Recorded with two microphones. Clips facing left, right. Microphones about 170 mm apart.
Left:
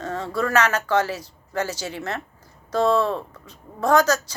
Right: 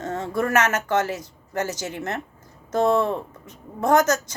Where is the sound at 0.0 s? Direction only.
20° right (ahead or behind).